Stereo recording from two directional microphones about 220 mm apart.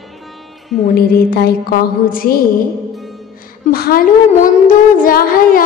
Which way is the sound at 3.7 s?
45° left (ahead or behind).